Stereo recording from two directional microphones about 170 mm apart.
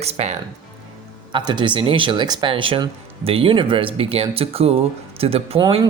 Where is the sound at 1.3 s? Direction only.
25° right (ahead or behind).